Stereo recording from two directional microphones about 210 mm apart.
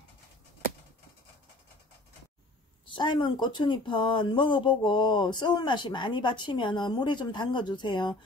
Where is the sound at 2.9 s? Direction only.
20° left (ahead or behind).